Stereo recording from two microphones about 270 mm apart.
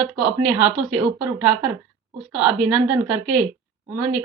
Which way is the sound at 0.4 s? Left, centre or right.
Centre.